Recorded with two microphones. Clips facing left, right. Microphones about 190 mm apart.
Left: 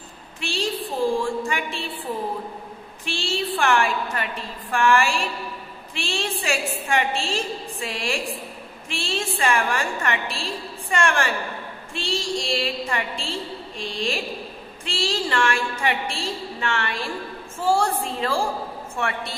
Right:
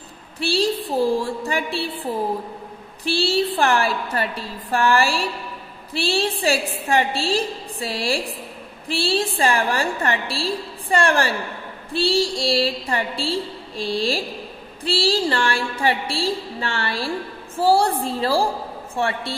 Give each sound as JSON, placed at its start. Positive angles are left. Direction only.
{"t": 0.4, "sound": "a woman's voice", "side_deg": -35}
{"t": 3.1, "sound": "a woman's voice", "side_deg": -35}